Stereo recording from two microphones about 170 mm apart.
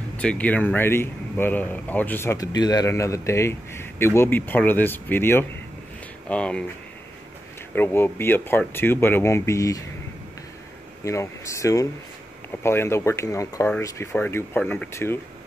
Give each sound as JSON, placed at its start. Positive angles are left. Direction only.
{"t": 0.2, "sound": "speech", "side_deg": 5}
{"t": 7.7, "sound": "speech", "side_deg": 10}
{"t": 11.1, "sound": "speech", "side_deg": 15}